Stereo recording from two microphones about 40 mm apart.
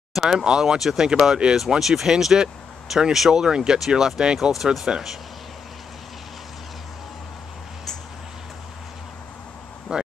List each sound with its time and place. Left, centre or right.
0.1 s speech: centre
4.4 s speech: centre
9.9 s a sound: right